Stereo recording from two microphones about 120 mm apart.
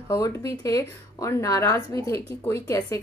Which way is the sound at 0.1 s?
25° left (ahead or behind).